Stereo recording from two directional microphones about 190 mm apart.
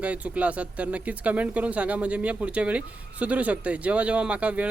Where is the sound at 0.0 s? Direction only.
5° right (ahead or behind).